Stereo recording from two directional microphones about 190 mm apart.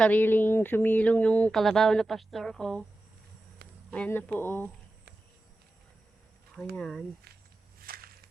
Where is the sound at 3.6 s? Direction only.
60° right (ahead or behind).